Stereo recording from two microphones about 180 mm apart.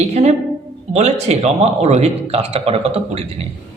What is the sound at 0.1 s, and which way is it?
A woman's voice, 35° right (ahead or behind).